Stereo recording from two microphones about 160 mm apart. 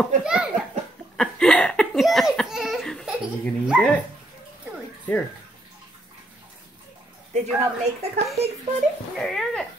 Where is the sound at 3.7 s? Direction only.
Centre (ahead or behind).